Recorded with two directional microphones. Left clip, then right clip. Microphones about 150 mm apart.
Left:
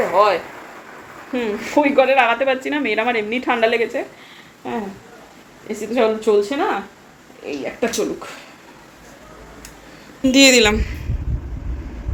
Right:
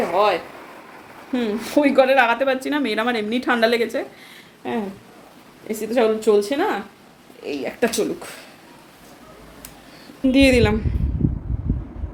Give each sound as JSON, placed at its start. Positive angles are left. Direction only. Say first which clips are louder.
{"t": 0.1, "sound": "a sound", "louder": "left 3 dB", "side_deg": -20}
{"t": 1.3, "sound": "a woman's voice", "louder": "left 1 dB", "side_deg": -25}
{"t": 10.2, "sound": "speech", "louder": "left 4 dB", "side_deg": -10}